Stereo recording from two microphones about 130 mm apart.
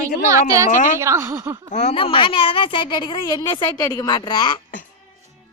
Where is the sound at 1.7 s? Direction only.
65° left (ahead or behind).